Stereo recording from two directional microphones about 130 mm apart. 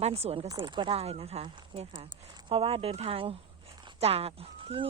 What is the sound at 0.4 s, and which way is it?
Speech, 35° right (ahead or behind).